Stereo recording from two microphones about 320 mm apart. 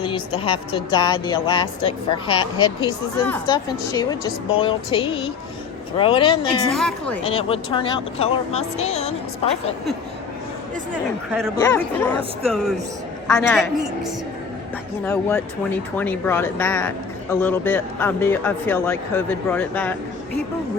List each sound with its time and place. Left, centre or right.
0.4 s speech: centre
6.7 s a woman's voice: centre
7.3 s speech: centre
11.3 s a woman's voice: centre
15.0 s speech: centre